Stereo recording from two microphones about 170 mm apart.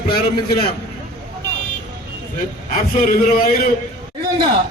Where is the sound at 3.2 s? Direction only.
55° left (ahead or behind).